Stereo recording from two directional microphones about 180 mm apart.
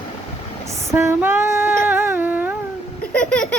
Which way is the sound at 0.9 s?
15° right (ahead or behind).